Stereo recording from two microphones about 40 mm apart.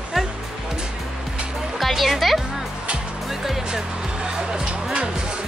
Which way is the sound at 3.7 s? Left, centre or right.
Centre.